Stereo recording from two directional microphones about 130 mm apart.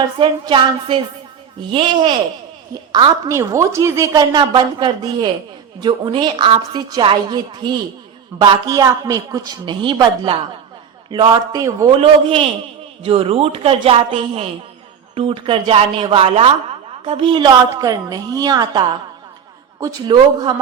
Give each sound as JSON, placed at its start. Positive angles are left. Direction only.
{"t": 0.2, "sound": "speech", "side_deg": -35}
{"t": 3.2, "sound": "a woman's voice", "side_deg": -25}